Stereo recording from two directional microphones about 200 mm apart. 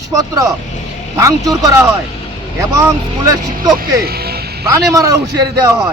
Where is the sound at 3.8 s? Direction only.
50° right (ahead or behind).